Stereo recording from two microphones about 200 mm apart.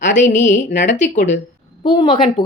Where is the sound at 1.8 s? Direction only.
25° left (ahead or behind).